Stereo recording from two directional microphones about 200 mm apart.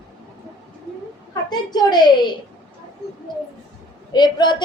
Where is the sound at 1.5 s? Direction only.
20° left (ahead or behind).